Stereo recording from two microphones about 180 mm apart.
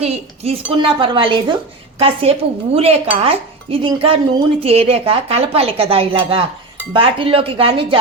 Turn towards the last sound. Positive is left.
turn(degrees=-30)  # may be behind; listen again after turning